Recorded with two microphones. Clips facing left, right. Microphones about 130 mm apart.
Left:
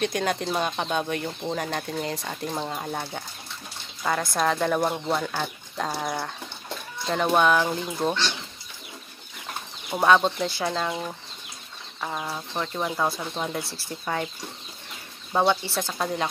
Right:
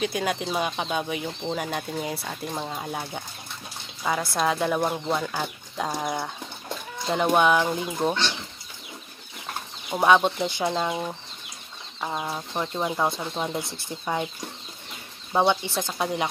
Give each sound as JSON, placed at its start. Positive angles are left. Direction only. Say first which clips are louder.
{"t": 0.0, "sound": "speech", "louder": "left 1 dB", "side_deg": -5}
{"t": 10.0, "sound": "speech", "louder": "even", "side_deg": -15}
{"t": 15.6, "sound": "speech", "louder": "right 1 dB", "side_deg": -15}